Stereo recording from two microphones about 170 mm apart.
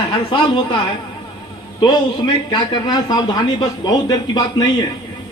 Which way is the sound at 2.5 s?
25° left (ahead or behind).